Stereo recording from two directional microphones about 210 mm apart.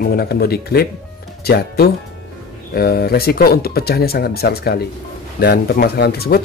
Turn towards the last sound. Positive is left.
turn(degrees=45)  # may be behind; listen again after turning